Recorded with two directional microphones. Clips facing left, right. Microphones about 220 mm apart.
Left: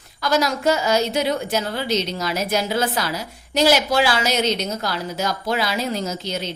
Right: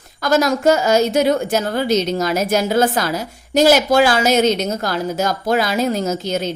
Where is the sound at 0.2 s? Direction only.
45° right (ahead or behind).